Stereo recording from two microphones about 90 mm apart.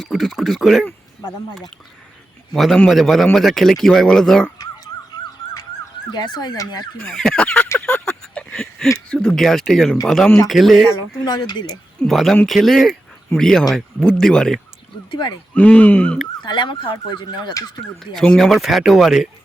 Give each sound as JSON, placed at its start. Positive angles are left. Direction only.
{"t": 0.0, "sound": "speech", "side_deg": 0}
{"t": 2.5, "sound": "speech", "side_deg": 0}
{"t": 6.1, "sound": "ambulance", "side_deg": 50}
{"t": 7.0, "sound": "speech", "side_deg": 10}
{"t": 8.0, "sound": "a sound", "side_deg": 10}
{"t": 9.0, "sound": "speech", "side_deg": 10}
{"t": 11.3, "sound": "ambulance", "side_deg": 50}
{"t": 12.0, "sound": "speech", "side_deg": 5}
{"t": 15.1, "sound": "ambulance", "side_deg": 55}
{"t": 15.5, "sound": "speech", "side_deg": 15}
{"t": 16.4, "sound": "speech", "side_deg": 60}
{"t": 18.0, "sound": "speech", "side_deg": 5}